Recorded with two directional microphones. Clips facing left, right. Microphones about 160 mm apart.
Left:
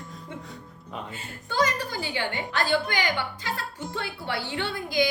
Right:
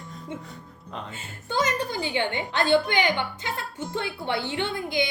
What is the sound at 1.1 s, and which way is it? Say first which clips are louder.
A woman's voice: even; 20° right (ahead or behind).